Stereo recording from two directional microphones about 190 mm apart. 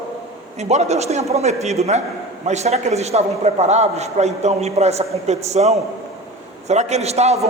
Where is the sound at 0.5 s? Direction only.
35° right (ahead or behind).